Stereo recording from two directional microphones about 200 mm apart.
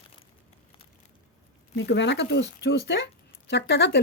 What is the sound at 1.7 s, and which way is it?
Speech, 60° left (ahead or behind).